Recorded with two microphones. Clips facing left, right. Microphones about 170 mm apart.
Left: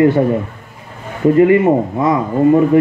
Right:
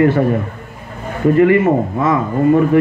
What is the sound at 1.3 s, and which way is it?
Speech, 20° left (ahead or behind).